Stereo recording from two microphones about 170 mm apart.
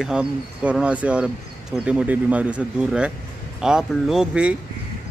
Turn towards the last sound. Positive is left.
turn(degrees=-5)  # may be behind; listen again after turning